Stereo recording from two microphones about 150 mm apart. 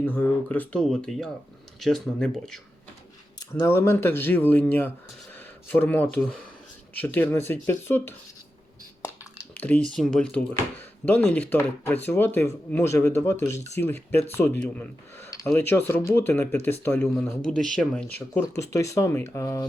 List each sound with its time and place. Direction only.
0.0 s speech: 15° left (ahead or behind)
3.5 s speech: 15° left (ahead or behind)
9.6 s speech: 10° left (ahead or behind)
18.3 s speech: 20° left (ahead or behind)